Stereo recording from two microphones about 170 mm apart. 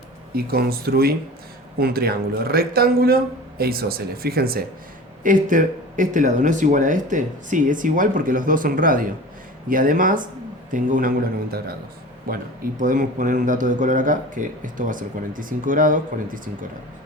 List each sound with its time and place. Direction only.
0.3 s speech: 65° right (ahead or behind)
5.2 s speech: 50° right (ahead or behind)
12.3 s speech: 60° right (ahead or behind)